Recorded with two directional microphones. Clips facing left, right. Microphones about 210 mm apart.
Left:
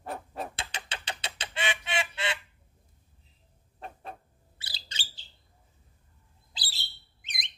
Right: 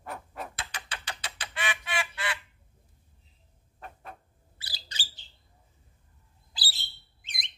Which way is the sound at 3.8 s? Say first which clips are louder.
Left 3 dB; 30° left (ahead or behind).